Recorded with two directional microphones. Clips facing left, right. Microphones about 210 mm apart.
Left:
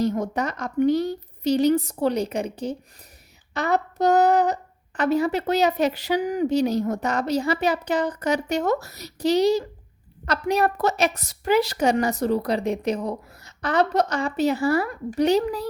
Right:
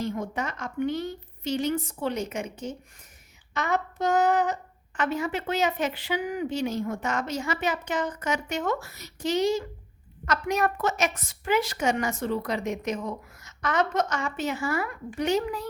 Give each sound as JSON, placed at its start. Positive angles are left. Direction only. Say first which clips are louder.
{"t": 0.0, "sound": "a woman's voice", "louder": "left 7 dB", "side_deg": 40}